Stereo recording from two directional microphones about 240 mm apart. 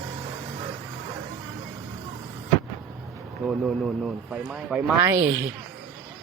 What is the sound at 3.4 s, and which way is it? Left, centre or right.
A woman's voice, centre.